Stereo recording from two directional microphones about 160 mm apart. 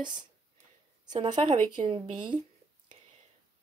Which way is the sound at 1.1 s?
25° right (ahead or behind).